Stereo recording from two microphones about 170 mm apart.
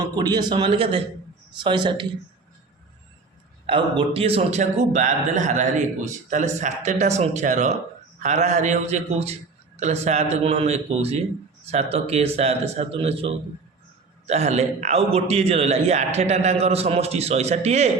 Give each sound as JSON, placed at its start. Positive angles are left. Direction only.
{"t": 0.0, "sound": "speech", "side_deg": -25}
{"t": 3.7, "sound": "a man's voice", "side_deg": -30}